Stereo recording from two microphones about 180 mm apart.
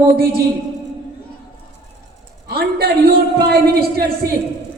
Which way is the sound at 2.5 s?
60° right (ahead or behind).